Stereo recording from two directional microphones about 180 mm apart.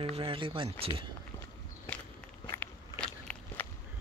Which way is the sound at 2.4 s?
15° left (ahead or behind).